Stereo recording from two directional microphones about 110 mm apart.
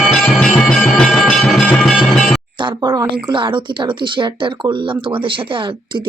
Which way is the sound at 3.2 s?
45° right (ahead or behind).